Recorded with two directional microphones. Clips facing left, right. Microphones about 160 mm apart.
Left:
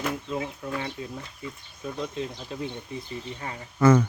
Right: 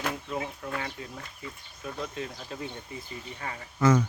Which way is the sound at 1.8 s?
Centre (ahead or behind).